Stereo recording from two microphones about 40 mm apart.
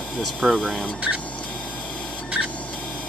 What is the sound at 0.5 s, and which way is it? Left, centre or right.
Speech, centre.